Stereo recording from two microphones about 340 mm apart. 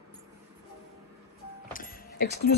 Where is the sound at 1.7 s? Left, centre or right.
Left.